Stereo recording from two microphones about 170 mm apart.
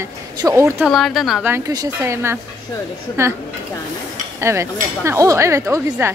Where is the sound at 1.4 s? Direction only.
15° right (ahead or behind).